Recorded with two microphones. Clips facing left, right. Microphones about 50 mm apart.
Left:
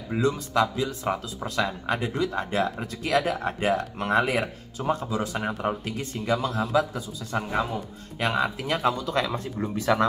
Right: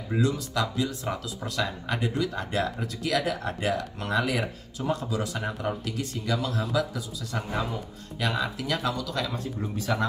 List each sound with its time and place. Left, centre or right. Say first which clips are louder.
0.1 s speech: left 3 dB; left
9.6 s speech: left 6 dB; left